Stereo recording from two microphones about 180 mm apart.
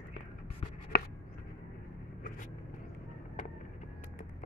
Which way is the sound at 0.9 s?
60° left (ahead or behind).